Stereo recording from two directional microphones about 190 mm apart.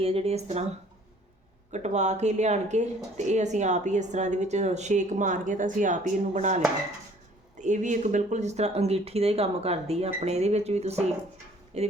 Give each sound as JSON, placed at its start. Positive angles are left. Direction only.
{"t": 0.0, "sound": "speech", "side_deg": -30}
{"t": 1.7, "sound": "speech", "side_deg": -35}
{"t": 7.6, "sound": "speech", "side_deg": -40}